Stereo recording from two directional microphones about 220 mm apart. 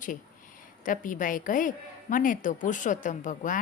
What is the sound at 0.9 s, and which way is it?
A woman's voice, 35° left (ahead or behind).